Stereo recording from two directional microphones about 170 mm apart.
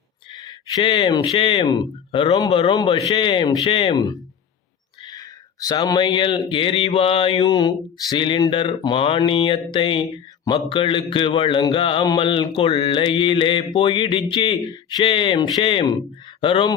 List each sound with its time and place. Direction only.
0.3 s speech: 25° left (ahead or behind)